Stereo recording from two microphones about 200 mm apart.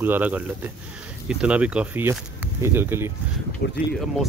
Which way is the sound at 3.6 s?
55° left (ahead or behind).